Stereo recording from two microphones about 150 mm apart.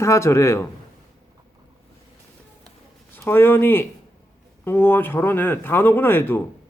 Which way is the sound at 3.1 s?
15° left (ahead or behind).